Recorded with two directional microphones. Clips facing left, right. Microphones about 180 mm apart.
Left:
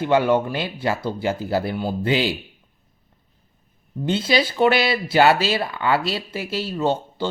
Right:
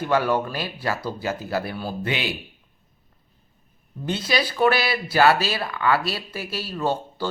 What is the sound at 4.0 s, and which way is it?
Speech, 25° left (ahead or behind).